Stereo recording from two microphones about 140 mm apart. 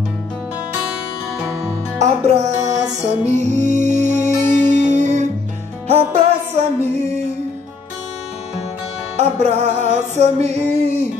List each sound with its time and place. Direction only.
2.0 s music: 55° right (ahead or behind)
9.1 s music: 50° right (ahead or behind)